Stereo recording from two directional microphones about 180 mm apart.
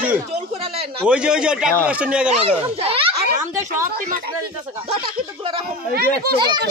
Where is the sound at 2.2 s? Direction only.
35° right (ahead or behind).